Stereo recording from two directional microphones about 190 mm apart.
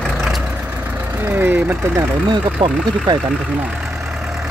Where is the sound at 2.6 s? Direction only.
25° right (ahead or behind).